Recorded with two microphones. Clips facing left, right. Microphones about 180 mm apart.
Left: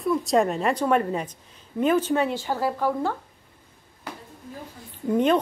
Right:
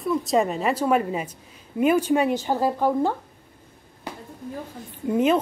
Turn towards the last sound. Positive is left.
turn(degrees=-5)  # may be behind; listen again after turning